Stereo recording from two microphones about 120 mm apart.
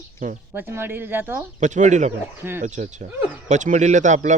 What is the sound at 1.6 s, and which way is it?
A man's voice, 90° right.